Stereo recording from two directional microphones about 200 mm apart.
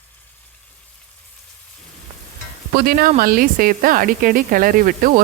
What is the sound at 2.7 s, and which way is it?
A woman's voice, 45° right (ahead or behind).